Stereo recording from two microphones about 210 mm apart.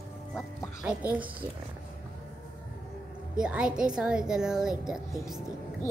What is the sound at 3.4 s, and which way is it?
Speech, 5° right (ahead or behind).